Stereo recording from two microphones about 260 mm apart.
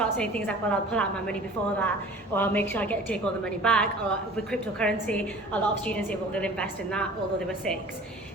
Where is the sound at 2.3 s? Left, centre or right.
Centre.